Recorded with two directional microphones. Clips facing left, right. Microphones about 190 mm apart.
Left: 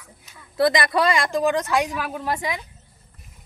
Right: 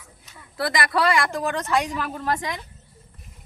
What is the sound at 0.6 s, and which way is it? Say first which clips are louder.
A woman's voice: left 4 dB; 20° left (ahead or behind).